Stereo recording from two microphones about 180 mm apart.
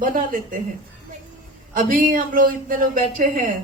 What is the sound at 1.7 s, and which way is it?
A man's voice, 50° right (ahead or behind).